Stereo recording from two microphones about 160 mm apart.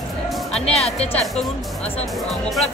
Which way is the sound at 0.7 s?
40° left (ahead or behind).